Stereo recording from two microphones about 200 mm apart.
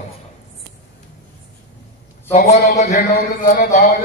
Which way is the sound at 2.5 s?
35° left (ahead or behind).